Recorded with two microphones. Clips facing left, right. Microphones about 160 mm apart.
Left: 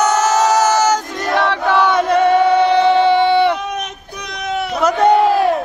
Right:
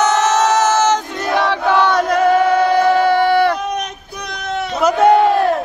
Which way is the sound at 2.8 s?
25° left (ahead or behind).